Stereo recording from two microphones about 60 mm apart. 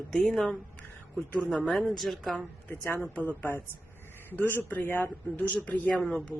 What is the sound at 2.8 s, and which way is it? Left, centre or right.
Speech, left.